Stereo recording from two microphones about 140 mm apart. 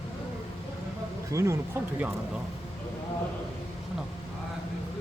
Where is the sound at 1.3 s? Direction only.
20° right (ahead or behind).